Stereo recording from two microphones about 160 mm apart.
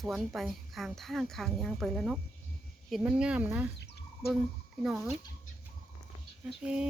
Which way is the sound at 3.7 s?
90° left.